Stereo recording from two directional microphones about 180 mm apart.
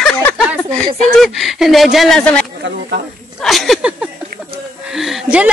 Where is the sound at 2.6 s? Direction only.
80° right.